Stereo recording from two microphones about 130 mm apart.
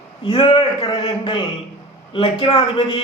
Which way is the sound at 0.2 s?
45° left (ahead or behind).